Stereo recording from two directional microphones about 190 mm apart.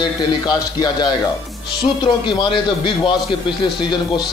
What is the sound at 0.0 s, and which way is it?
Speech, 25° left (ahead or behind).